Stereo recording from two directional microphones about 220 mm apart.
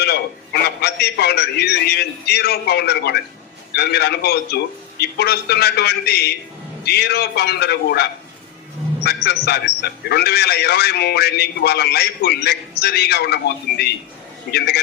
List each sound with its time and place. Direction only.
0.0 s a man's voice: 45° left (ahead or behind)
9.0 s a man's voice: 45° left (ahead or behind)